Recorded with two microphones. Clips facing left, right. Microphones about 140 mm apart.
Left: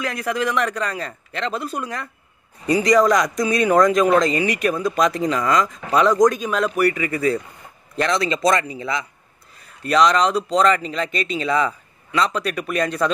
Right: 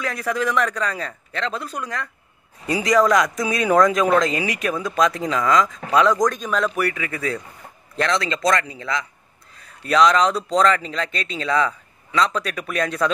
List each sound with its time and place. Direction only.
0.0 s speech: centre (ahead or behind)
1.5 s speech: 25° left (ahead or behind)
2.6 s speech: centre (ahead or behind)
9.8 s speech: centre (ahead or behind)